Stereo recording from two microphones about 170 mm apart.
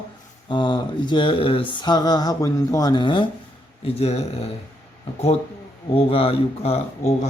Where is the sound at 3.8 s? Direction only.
35° left (ahead or behind).